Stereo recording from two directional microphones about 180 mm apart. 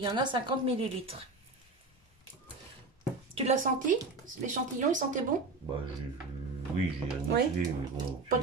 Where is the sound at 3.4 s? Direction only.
40° right (ahead or behind).